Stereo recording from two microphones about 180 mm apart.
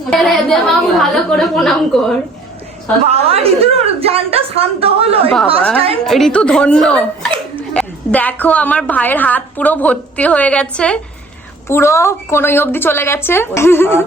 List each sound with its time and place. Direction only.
0.0 s a woman's voice: centre (ahead or behind)
3.1 s a woman's voice: 35° right (ahead or behind)
6.1 s a woman's voice: centre (ahead or behind)